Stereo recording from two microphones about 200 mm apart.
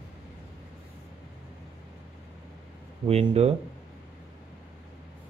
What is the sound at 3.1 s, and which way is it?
Speech, 30° right (ahead or behind).